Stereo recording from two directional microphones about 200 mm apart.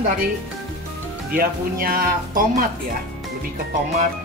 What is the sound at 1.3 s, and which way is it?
Speech, 45° right (ahead or behind).